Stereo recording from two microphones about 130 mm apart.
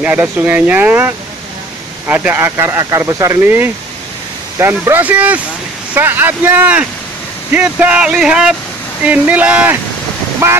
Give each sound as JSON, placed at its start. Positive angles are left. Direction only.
{"t": 0.0, "sound": "speech", "side_deg": -15}